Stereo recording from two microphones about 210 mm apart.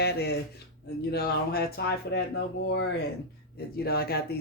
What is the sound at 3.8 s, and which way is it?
Speech, 45° left (ahead or behind).